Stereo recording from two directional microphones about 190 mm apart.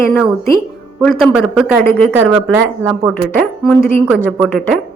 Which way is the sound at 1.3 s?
5° right (ahead or behind).